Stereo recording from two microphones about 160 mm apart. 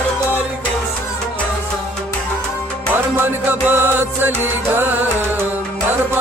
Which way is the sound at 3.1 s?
15° right (ahead or behind).